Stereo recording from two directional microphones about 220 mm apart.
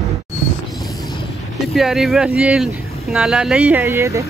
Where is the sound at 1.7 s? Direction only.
Centre (ahead or behind).